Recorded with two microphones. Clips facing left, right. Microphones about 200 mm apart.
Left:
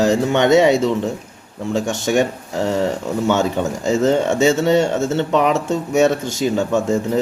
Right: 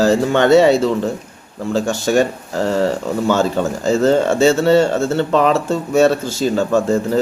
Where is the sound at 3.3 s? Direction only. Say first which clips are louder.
Right 2 dB; 20° left (ahead or behind).